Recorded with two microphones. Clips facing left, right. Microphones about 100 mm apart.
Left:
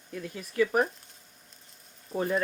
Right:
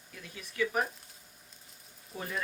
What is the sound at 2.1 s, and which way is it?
Speech, 45° left (ahead or behind).